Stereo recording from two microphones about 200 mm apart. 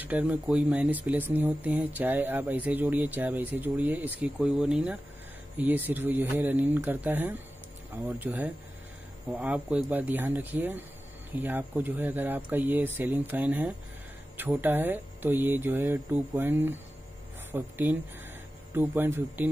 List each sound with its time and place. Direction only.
0.0 s speech: 5° right (ahead or behind)